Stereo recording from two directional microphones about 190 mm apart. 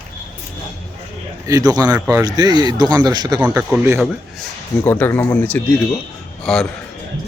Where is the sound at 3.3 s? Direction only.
5° right (ahead or behind).